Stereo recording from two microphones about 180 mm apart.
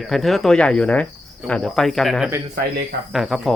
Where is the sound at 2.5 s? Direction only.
55° right (ahead or behind).